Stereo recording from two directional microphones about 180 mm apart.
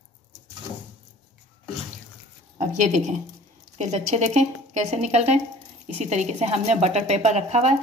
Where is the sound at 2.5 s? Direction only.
45° right (ahead or behind).